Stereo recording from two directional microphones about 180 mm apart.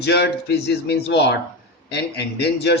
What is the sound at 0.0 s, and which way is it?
A man's voice, 65° left (ahead or behind).